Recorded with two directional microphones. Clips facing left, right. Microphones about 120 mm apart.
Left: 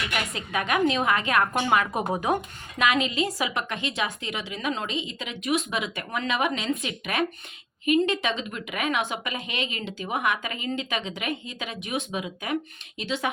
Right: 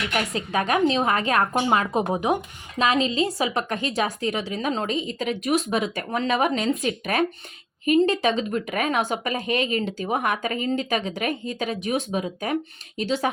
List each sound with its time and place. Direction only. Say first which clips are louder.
0.1 s speech: right 4 dB; 35° right (ahead or behind); by 2.8 s 20° right (ahead or behind)
2.8 s speech: right 3 dB; 30° right (ahead or behind)